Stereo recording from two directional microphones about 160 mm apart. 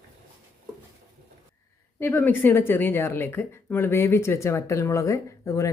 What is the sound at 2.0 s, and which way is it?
A woman's voice, 15° left (ahead or behind).